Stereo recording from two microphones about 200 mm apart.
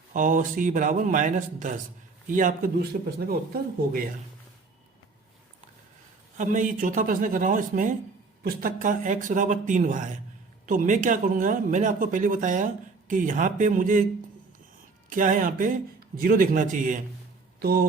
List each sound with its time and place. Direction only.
0.1 s speech: 40° right (ahead or behind)
6.3 s speech: 40° right (ahead or behind)
15.1 s speech: 40° right (ahead or behind)